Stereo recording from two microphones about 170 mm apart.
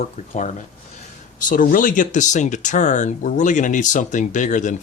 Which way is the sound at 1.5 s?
50° left (ahead or behind).